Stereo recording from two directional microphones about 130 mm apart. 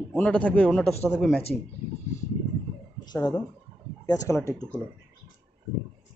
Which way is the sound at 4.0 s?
30° left (ahead or behind).